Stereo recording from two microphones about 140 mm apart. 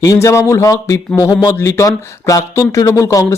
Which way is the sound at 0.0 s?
25° left (ahead or behind).